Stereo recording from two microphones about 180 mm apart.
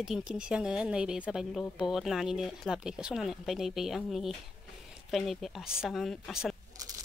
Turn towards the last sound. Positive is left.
turn(degrees=0)  # may be behind; listen again after turning